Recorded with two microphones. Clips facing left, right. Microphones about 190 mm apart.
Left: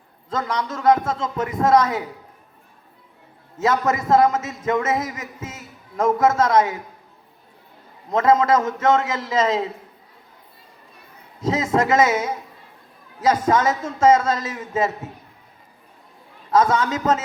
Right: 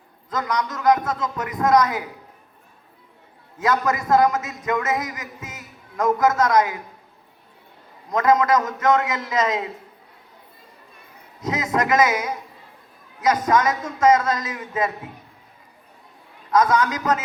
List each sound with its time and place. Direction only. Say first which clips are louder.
0.3 s speech: even; 30° left (ahead or behind)
3.6 s speech: left 1 dB; 25° left (ahead or behind)
8.1 s speech: left 1 dB; 25° left (ahead or behind)
11.3 s a man's voice: left 3 dB; 25° left (ahead or behind)
16.5 s speech: even; 25° left (ahead or behind)